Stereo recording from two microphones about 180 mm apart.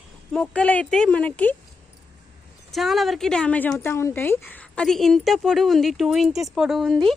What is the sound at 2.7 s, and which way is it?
A woman's voice, centre (ahead or behind).